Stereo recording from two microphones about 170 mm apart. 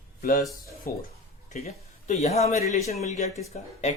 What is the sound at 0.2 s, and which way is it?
Speech, 55° left (ahead or behind).